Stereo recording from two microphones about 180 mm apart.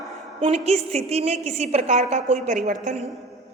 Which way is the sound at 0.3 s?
35° right (ahead or behind).